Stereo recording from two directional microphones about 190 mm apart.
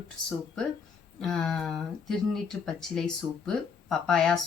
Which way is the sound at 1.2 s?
Centre (ahead or behind).